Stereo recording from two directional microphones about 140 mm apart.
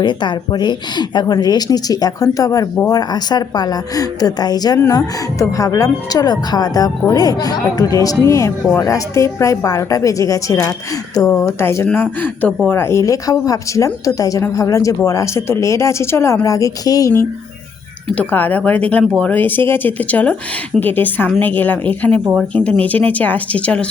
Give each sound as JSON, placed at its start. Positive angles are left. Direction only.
{"t": 0.0, "sound": "speech", "side_deg": 35}